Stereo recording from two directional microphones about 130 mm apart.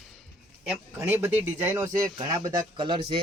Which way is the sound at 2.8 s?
40° right (ahead or behind).